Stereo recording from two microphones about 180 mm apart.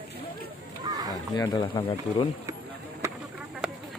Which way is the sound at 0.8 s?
20° right (ahead or behind).